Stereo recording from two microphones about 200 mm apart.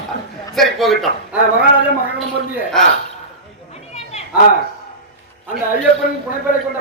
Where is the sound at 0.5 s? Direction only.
Centre (ahead or behind).